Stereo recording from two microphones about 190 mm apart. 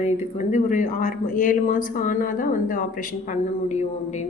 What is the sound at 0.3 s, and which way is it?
Speech, 40° left (ahead or behind).